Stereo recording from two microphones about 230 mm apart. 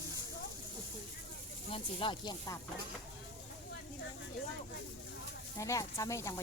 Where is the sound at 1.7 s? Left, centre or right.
Left.